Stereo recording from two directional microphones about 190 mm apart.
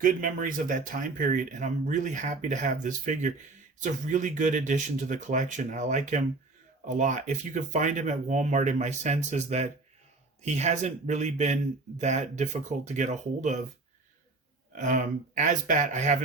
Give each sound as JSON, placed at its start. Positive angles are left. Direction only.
{"t": 0.0, "sound": "speech", "side_deg": -45}
{"t": 14.8, "sound": "speech", "side_deg": -40}